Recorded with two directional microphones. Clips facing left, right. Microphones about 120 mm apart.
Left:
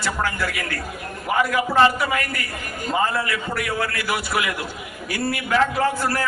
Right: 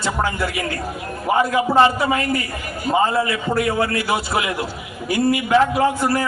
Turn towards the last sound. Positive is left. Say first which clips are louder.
# right 4 dB
turn(degrees=-20)  # may be behind; listen again after turning